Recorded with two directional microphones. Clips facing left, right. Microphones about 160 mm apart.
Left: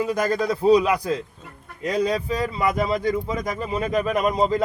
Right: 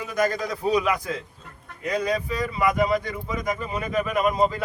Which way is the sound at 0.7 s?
35° left (ahead or behind).